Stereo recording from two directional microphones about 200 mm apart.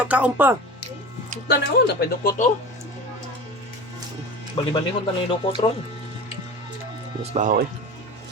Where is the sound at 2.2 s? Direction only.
45° left (ahead or behind).